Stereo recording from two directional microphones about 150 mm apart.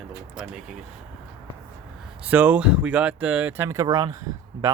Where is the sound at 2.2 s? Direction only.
10° right (ahead or behind).